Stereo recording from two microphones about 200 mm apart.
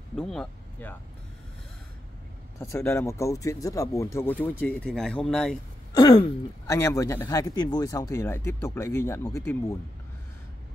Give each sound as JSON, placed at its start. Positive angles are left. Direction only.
{"t": 0.1, "sound": "speech", "side_deg": 5}
{"t": 2.6, "sound": "speech", "side_deg": 15}
{"t": 5.9, "sound": "speech", "side_deg": 25}
{"t": 6.7, "sound": "speech", "side_deg": 15}